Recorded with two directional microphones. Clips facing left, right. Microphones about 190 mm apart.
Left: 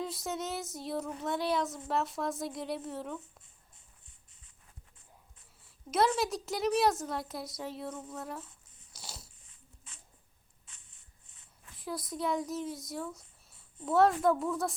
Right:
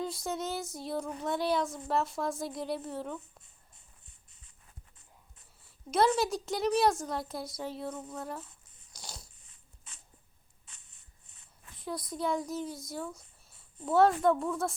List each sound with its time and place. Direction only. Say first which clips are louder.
0.0 s a sound: right 2 dB; centre (ahead or behind)
5.6 s a woman's voice: right 2 dB; centre (ahead or behind)
11.8 s speech: right 1 dB; centre (ahead or behind)